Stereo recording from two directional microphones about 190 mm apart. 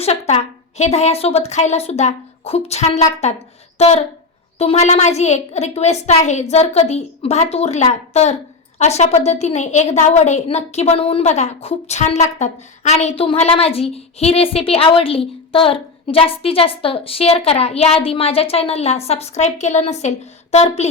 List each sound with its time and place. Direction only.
0.0 s a woman's voice: 35° left (ahead or behind)